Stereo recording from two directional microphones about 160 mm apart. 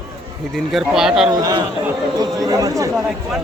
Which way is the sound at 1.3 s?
25° right (ahead or behind).